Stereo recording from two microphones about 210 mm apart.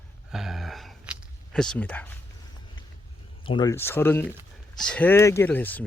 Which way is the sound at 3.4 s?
20° left (ahead or behind).